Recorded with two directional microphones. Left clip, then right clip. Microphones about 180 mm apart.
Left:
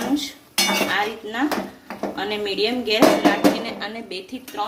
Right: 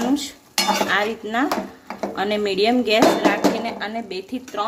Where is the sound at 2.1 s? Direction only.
55° right (ahead or behind).